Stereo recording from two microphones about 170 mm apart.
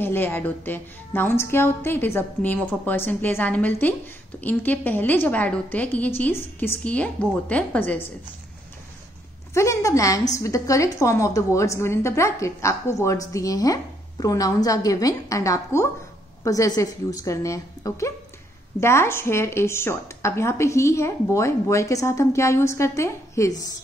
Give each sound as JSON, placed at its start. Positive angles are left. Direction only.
{"t": 0.0, "sound": "a woman's voice", "side_deg": 15}
{"t": 9.5, "sound": "a woman's voice", "side_deg": 15}